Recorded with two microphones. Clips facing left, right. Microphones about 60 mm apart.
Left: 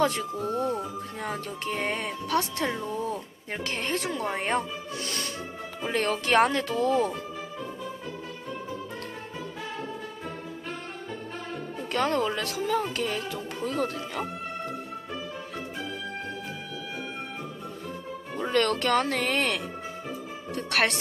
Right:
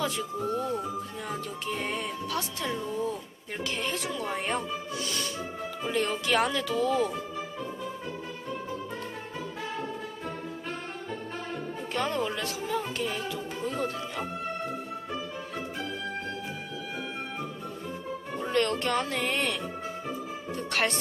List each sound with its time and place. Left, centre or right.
0.0 s speech: left
9.7 s music: centre
11.9 s speech: left
13.7 s music: left
18.5 s speech: left
20.6 s speech: left